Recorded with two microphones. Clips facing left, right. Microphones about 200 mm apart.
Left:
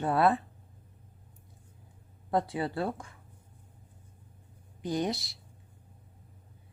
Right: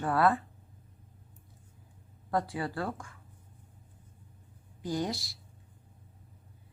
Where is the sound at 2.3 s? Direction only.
20° left (ahead or behind).